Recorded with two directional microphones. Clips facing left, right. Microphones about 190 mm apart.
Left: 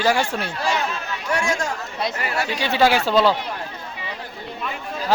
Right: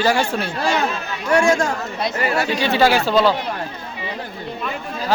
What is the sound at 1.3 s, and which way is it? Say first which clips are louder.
Speech: right 8 dB; 55° right (ahead or behind).